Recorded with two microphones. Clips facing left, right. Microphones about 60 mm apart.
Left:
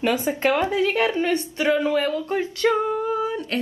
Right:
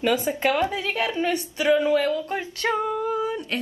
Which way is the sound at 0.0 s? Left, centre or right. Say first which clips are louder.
Left 1 dB; left.